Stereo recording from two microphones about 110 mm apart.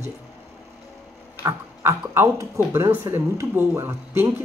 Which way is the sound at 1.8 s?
25° right (ahead or behind).